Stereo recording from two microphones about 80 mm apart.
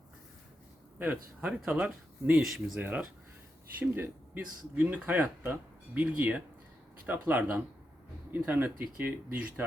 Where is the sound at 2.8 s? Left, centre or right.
Right.